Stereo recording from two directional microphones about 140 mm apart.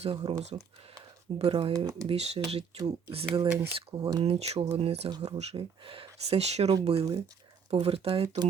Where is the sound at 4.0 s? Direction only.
30° right (ahead or behind).